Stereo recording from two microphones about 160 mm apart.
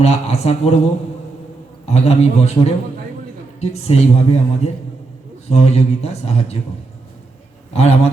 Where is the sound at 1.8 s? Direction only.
40° left (ahead or behind).